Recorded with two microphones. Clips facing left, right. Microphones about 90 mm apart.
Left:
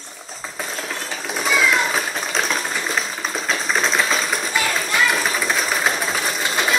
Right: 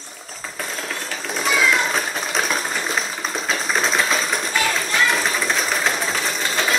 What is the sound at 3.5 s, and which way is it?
Sewing machine, centre (ahead or behind).